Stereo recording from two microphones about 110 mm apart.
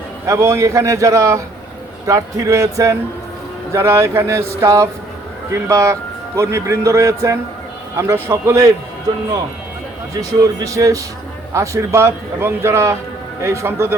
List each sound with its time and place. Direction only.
0.3 s a man's voice: 25° right (ahead or behind)
10.2 s a man's voice: 30° right (ahead or behind)